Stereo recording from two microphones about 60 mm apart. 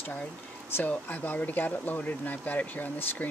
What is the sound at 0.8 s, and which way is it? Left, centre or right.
Speech, left.